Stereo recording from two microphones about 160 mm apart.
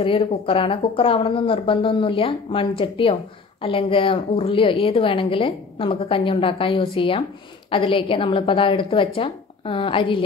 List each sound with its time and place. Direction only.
0.0 s a woman's voice: 35° left (ahead or behind)